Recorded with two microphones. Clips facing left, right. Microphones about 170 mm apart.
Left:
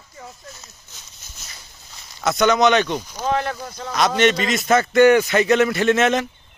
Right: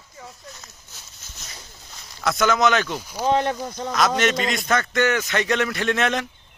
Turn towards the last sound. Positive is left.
turn(degrees=5)  # may be behind; listen again after turning